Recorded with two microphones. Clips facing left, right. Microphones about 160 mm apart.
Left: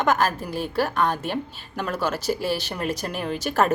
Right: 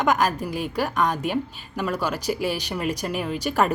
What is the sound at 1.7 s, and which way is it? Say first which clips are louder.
A woman's voice: even; 10° right (ahead or behind).